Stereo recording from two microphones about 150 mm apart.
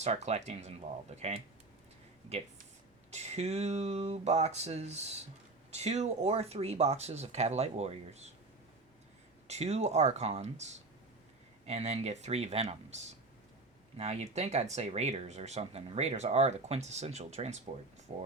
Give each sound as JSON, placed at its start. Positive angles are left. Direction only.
{"t": 0.0, "sound": "speech", "side_deg": -45}
{"t": 3.1, "sound": "speech", "side_deg": -45}
{"t": 9.5, "sound": "speech", "side_deg": -45}